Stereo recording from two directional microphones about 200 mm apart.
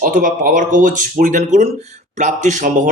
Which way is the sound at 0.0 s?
45° right (ahead or behind).